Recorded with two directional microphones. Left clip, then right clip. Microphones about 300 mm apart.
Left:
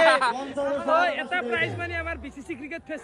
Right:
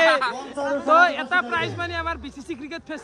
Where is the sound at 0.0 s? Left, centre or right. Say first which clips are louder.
Right 1 dB; centre.